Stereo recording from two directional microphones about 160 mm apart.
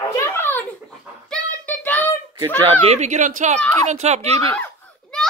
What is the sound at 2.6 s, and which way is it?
Speech, 40° right (ahead or behind).